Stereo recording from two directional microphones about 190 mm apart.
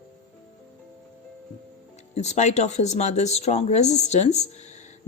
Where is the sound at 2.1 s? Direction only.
35° left (ahead or behind).